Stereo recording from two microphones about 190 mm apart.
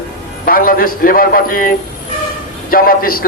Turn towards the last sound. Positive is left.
turn(degrees=50)  # may be behind; listen again after turning